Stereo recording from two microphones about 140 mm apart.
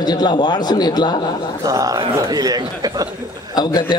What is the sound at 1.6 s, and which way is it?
A man's voice, 25° right (ahead or behind).